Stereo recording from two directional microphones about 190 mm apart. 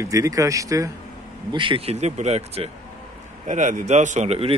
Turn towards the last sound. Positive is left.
turn(degrees=-30)  # may be behind; listen again after turning